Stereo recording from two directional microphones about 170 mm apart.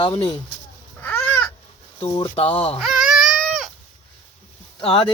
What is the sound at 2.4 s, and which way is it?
Speech, 35° left (ahead or behind).